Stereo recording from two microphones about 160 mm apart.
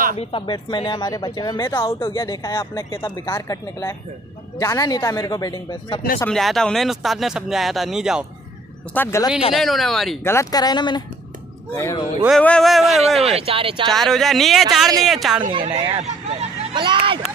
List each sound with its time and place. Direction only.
0.1 s speech: 35° left (ahead or behind)
6.3 s speech: 5° left (ahead or behind)
8.9 s speech: 15° left (ahead or behind)
9.5 s speech: centre (ahead or behind)
10.2 s speech: 20° left (ahead or behind)
12.3 s speech: 5° left (ahead or behind)
13.2 s speech: 40° right (ahead or behind)
13.8 s speech: centre (ahead or behind)
15.5 s speech: 40° right (ahead or behind)